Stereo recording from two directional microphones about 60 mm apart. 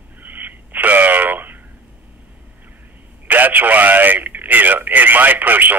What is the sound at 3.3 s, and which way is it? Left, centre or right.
Speech, right.